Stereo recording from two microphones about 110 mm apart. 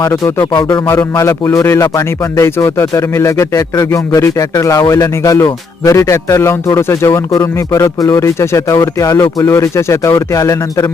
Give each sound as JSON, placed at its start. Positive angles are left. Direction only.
{"t": 1.1, "sound": "speech", "side_deg": 25}